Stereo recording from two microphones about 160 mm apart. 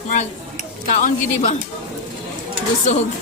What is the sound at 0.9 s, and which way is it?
Speech, 50° left (ahead or behind).